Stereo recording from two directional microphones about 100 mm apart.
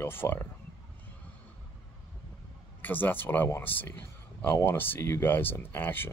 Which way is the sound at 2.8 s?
20° left (ahead or behind).